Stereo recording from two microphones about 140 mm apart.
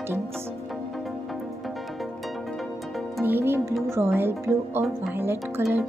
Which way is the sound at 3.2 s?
15° right (ahead or behind).